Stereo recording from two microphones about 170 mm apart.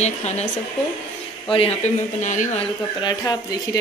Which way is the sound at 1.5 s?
35° left (ahead or behind).